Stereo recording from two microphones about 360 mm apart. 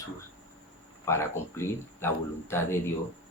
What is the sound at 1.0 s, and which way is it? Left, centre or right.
Speech, centre.